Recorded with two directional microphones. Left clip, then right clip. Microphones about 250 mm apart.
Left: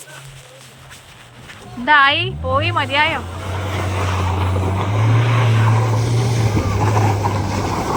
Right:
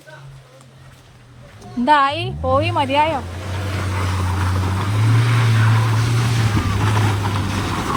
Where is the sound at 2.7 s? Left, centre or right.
Centre.